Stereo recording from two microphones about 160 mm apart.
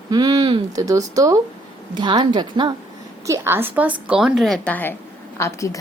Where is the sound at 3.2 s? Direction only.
15° right (ahead or behind); by 4.7 s centre (ahead or behind).